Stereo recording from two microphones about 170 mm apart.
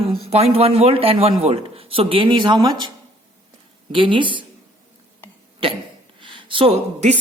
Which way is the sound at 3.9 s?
30° right (ahead or behind).